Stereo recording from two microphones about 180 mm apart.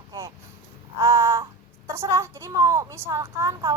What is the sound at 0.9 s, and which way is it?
Crow, 20° right (ahead or behind).